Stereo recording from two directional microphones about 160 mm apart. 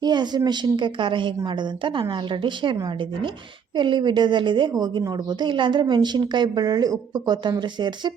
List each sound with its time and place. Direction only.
0.0 s a woman's voice: 25° right (ahead or behind)